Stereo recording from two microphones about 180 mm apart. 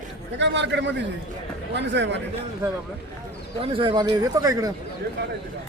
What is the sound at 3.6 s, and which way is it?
Speech, 30° right (ahead or behind).